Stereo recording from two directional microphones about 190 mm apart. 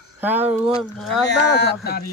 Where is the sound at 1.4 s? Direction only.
60° left (ahead or behind).